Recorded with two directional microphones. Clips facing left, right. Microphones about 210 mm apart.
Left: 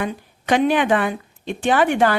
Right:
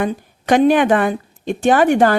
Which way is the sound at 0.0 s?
45° right (ahead or behind).